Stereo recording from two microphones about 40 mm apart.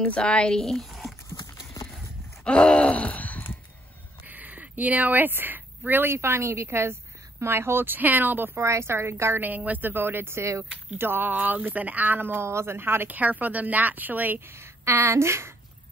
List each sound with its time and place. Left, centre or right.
0.0 s speech: left
0.6 s speech: centre
0.8 s a sound: centre
2.4 s groan: left
4.2 s a sound: right
6.0 s a woman's voice: right
8.8 s a woman's voice: right
9.8 s a man's voice: right
11.0 s speech: right
12.4 s a man's voice: right
13.1 s speech: right
14.4 s a woman's voice: right